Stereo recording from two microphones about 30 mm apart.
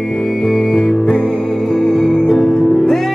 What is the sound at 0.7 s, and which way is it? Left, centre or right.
Music, centre.